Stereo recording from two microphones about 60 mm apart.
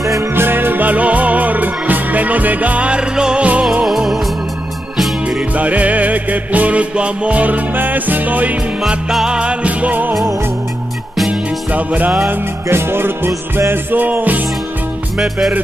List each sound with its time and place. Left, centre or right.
0.4 s music: right; by 4.2 s centre
5.6 s music: right
8.8 s music: centre; by 10.1 s right
11.7 s music: right
12.6 s music: right
14.0 s music: right